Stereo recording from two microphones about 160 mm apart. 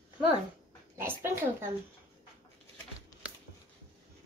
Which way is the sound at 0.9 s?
15° right (ahead or behind).